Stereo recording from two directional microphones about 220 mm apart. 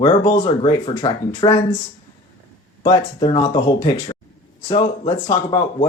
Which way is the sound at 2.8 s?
20° left (ahead or behind).